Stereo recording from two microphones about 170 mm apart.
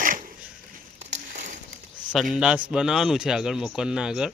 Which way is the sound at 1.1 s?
45° right (ahead or behind).